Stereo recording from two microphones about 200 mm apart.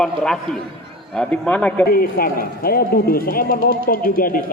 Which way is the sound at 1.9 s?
45° left (ahead or behind).